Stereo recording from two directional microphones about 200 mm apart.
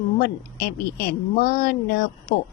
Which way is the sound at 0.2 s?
50° left (ahead or behind).